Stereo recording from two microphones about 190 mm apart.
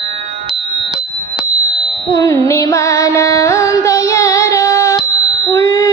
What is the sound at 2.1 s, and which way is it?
Carnatic music, 15° left (ahead or behind).